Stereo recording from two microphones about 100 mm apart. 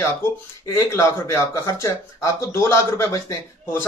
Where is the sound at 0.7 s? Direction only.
30° left (ahead or behind).